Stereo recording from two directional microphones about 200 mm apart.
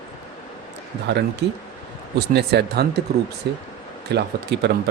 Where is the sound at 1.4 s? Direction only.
60° right (ahead or behind).